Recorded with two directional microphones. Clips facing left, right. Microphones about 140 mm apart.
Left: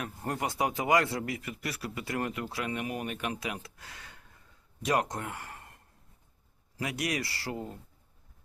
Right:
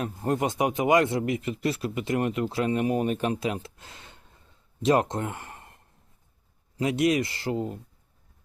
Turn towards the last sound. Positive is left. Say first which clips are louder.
# right 8 dB
turn(degrees=-20)  # may be behind; listen again after turning